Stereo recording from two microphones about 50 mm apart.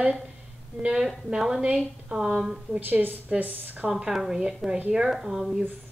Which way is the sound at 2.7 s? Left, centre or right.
Right.